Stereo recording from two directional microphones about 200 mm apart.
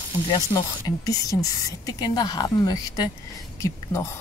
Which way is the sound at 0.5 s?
15° left (ahead or behind).